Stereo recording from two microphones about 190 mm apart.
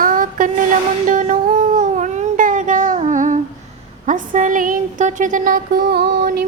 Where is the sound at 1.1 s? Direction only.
40° right (ahead or behind).